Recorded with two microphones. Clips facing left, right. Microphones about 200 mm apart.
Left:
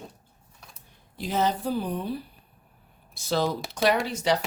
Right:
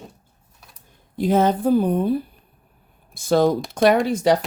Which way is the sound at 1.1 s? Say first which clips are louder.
Right 8 dB; 50° right (ahead or behind).